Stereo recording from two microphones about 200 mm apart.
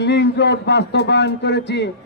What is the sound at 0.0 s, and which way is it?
A man's voice, 60° left (ahead or behind).